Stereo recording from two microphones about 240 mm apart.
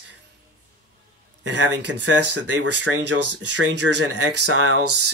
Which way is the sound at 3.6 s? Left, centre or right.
Right.